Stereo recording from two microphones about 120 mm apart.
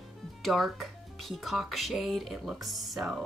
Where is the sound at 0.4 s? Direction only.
Centre (ahead or behind).